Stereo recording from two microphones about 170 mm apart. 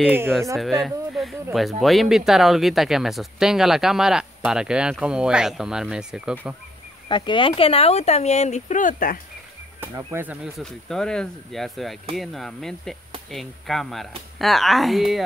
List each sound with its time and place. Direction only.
0.6 s speech: centre (ahead or behind)
7.1 s speech: 30° left (ahead or behind); by 9.2 s 55° left (ahead or behind)
9.8 s speech: 15° right (ahead or behind)
10.6 s speech: 5° left (ahead or behind)